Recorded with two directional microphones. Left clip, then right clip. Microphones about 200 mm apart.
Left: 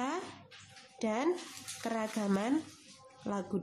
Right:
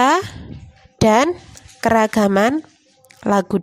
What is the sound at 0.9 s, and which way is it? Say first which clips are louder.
A woman's voice: right 19 dB; 50° right (ahead or behind).